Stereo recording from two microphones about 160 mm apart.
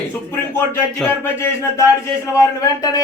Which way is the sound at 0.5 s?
10° left (ahead or behind).